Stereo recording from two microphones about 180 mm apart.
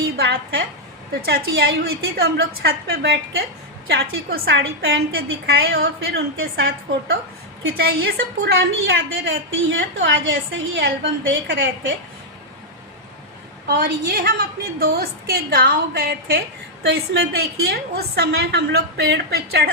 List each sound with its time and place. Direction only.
0.2 s a woman's voice: 70° right (ahead or behind)
7.8 s a woman's voice: 60° right (ahead or behind); by 11.9 s 90° right
13.7 s a woman's voice: 60° right (ahead or behind)